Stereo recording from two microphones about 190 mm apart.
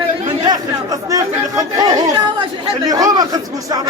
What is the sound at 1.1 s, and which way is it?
Chatter, 20° right (ahead or behind).